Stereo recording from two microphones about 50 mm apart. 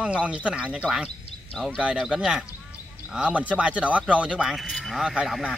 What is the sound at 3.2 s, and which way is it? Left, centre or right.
Speech, right.